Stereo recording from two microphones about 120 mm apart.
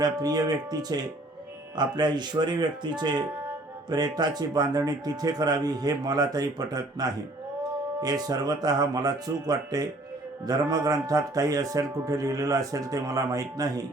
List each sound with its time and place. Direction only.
0.0 s speech: 30° right (ahead or behind)